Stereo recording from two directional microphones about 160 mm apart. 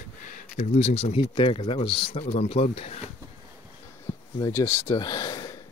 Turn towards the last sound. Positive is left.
turn(degrees=25)  # may be behind; listen again after turning